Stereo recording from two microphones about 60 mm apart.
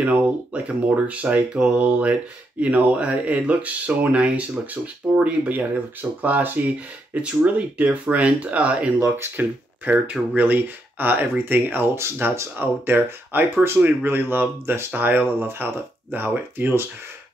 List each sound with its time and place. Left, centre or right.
0.0 s speech: right
9.1 s speech: right